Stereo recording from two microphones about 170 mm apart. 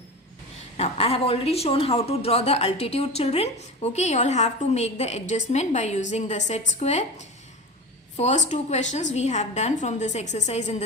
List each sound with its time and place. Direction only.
0.8 s a woman's voice: 35° left (ahead or behind)